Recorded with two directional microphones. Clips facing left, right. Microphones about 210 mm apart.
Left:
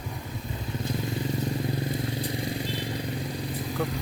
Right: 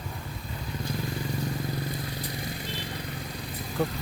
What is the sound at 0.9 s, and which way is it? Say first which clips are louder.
Vehicle: left 3 dB; 25° left (ahead or behind).